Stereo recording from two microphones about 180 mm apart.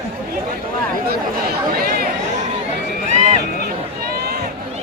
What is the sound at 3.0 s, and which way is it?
Run, 40° right (ahead or behind).